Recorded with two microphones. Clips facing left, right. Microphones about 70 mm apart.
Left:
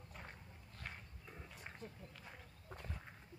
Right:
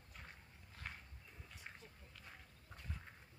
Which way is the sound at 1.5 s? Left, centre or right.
Centre.